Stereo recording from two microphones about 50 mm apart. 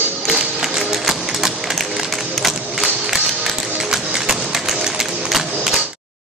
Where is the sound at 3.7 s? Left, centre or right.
Centre.